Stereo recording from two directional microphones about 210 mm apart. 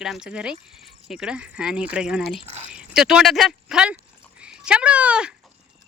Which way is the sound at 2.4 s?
30° right (ahead or behind).